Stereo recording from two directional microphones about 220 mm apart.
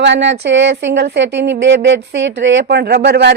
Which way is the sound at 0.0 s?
55° right (ahead or behind).